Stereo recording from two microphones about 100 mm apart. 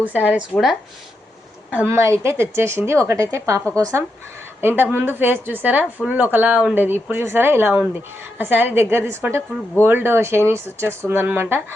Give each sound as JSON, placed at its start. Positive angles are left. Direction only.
{"t": 0.0, "sound": "speech", "side_deg": -15}
{"t": 0.5, "sound": "speech", "side_deg": 0}
{"t": 1.7, "sound": "a woman's voice", "side_deg": -20}
{"t": 4.6, "sound": "a woman's voice", "side_deg": -20}